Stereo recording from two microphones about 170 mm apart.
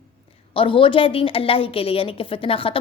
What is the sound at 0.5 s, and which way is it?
A woman's voice, 30° left (ahead or behind).